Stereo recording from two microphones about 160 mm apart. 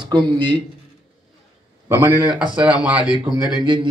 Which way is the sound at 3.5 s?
30° right (ahead or behind).